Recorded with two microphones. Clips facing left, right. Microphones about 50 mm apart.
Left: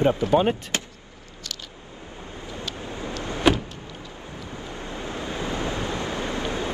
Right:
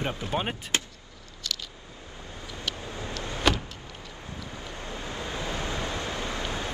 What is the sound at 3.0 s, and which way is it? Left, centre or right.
Power windows, left.